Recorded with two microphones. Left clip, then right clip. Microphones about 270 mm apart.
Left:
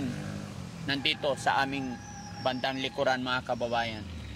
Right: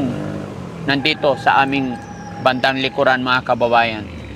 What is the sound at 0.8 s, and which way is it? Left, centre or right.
Speech, centre.